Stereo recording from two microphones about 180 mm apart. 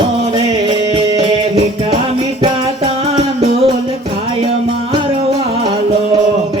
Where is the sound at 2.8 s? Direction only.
35° right (ahead or behind).